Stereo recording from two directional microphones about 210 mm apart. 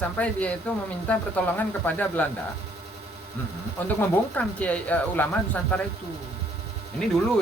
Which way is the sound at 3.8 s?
5° left (ahead or behind).